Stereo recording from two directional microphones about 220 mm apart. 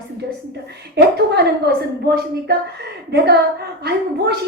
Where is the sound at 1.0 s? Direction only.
50° right (ahead or behind).